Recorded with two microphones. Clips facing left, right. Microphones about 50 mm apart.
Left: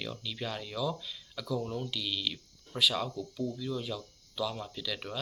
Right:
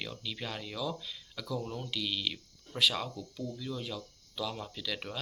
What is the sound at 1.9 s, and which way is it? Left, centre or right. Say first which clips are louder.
Speech: even; right.